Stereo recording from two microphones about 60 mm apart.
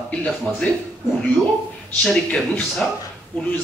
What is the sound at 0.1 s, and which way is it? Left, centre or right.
Speech, centre.